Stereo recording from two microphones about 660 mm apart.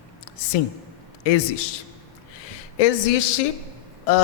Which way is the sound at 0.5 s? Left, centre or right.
Left.